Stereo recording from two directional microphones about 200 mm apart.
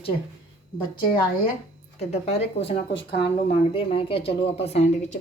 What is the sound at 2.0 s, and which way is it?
A woman's voice, 35° left (ahead or behind).